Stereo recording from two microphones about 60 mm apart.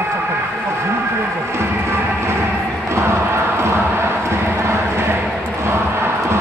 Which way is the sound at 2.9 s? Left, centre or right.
Right.